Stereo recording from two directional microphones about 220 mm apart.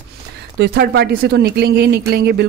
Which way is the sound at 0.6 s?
45° right (ahead or behind).